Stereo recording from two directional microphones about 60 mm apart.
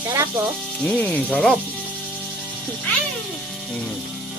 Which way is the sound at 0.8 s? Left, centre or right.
Centre.